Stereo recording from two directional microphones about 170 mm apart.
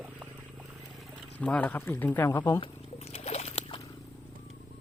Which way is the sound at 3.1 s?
40° left (ahead or behind).